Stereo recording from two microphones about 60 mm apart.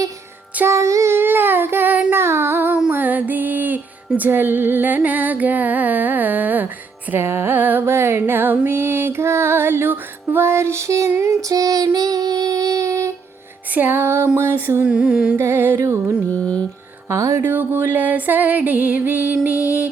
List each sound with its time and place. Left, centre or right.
0.6 s music: right
1.1 s a sound: right
2.1 s child singing: right
2.9 s female singing: right
7.1 s music: right
13.7 s music: right
14.3 s a sound: right
14.8 s music: centre
15.4 s music: right
15.8 s a sound: right
16.3 s mantra: left
17.1 s music: right
17.4 s music: right